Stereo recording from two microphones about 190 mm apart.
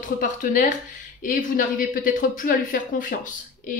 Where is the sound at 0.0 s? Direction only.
45° left (ahead or behind).